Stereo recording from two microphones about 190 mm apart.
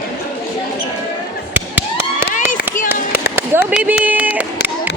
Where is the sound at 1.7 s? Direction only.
10° right (ahead or behind).